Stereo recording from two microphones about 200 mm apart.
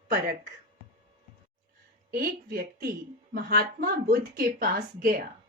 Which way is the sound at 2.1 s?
45° right (ahead or behind).